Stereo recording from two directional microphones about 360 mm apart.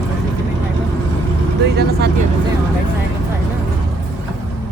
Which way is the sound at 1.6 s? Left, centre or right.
Right.